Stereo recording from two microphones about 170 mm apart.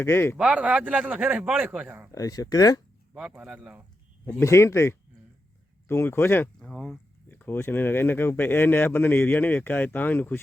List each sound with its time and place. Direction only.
0.0 s speech: 15° left (ahead or behind)
0.3 s a man's voice: 5° right (ahead or behind)
2.1 s speech: 20° left (ahead or behind)
3.2 s speech: 5° right (ahead or behind)
4.4 s speech: 15° left (ahead or behind)